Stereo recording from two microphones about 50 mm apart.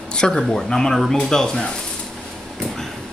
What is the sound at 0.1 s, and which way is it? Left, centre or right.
Speech, centre.